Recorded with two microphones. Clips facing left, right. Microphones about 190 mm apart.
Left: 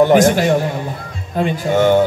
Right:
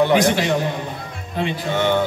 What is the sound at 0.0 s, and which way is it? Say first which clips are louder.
Speech: left 5 dB; 45° left (ahead or behind).